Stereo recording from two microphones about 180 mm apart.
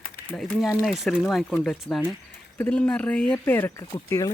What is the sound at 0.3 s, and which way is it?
Speech, 5° left (ahead or behind).